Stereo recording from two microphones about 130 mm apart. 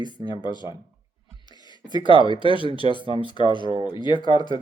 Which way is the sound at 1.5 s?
35° left (ahead or behind).